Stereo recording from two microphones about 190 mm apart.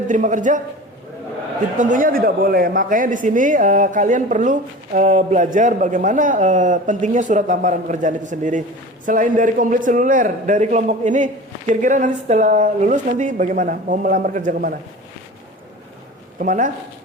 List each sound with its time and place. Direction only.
0.1 s a man's voice: 40° right (ahead or behind)
1.8 s a woman's voice: 45° right (ahead or behind)
16.4 s a woman's voice: 45° right (ahead or behind)